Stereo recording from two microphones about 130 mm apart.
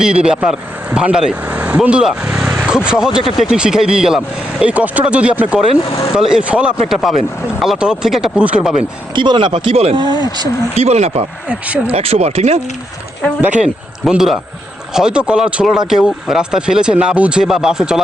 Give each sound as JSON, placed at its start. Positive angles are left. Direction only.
{"t": 0.0, "sound": "speech", "side_deg": -5}
{"t": 9.1, "sound": "speech", "side_deg": -35}
{"t": 11.4, "sound": "speech", "side_deg": -10}
{"t": 11.9, "sound": "speech", "side_deg": -50}
{"t": 13.4, "sound": "speech", "side_deg": -10}